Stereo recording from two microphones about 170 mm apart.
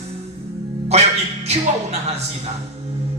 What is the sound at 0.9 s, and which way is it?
Speech, 40° right (ahead or behind).